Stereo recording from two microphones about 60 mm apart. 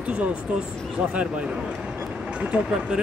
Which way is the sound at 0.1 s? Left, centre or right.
Right.